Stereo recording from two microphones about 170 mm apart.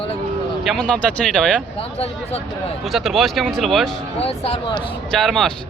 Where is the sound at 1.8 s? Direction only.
35° left (ahead or behind).